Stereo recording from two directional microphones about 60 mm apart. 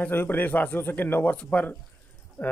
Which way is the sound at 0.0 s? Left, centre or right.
Left.